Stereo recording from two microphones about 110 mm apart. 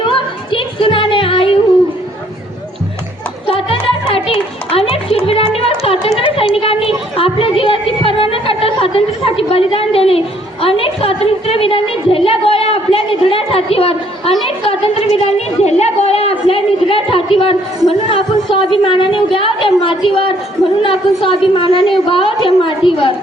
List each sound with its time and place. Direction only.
0.0 s music: 50° left (ahead or behind)
3.4 s music: 55° left (ahead or behind)
5.8 s a sound: 60° left (ahead or behind)
14.4 s a woman's voice: 60° left (ahead or behind)
16.5 s a sound: 55° left (ahead or behind)
17.8 s a woman's voice: 55° left (ahead or behind)